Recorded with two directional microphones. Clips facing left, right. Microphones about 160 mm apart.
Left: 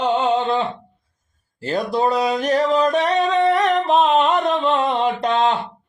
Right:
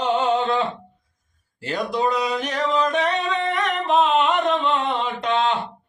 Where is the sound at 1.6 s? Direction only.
35° left (ahead or behind).